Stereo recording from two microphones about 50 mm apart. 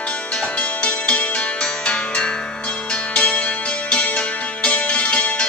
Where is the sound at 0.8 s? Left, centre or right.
Left.